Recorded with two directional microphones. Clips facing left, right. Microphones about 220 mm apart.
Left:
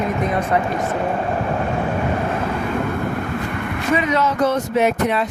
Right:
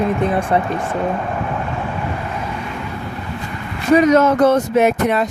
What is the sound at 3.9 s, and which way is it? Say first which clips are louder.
Speech: right 8 dB; 40° right (ahead or behind).